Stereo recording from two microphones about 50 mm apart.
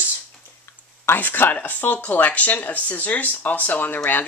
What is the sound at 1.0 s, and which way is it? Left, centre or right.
Speech, left.